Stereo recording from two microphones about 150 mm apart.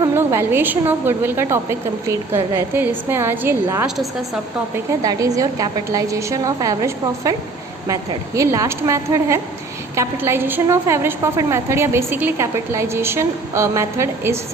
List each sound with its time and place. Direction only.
0.1 s a woman's voice: 15° right (ahead or behind)
5.0 s a woman's voice: 25° right (ahead or behind)
8.4 s a woman's voice: 20° right (ahead or behind)